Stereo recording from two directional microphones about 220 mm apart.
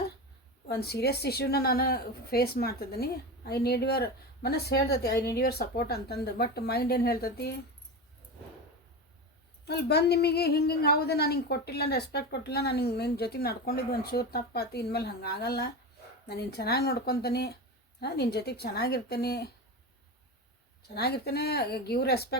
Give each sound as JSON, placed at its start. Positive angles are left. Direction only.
{"t": 0.7, "sound": "a woman's voice", "side_deg": 45}
{"t": 9.6, "sound": "a woman's voice", "side_deg": 50}
{"t": 20.9, "sound": "a woman's voice", "side_deg": 45}